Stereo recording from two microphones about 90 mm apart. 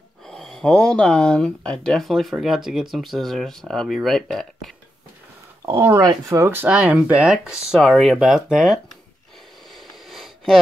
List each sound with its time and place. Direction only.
0.3 s speech: 5° left (ahead or behind)
5.7 s speech: 25° right (ahead or behind); by 8.7 s 5° right (ahead or behind)
9.8 s a sound: centre (ahead or behind)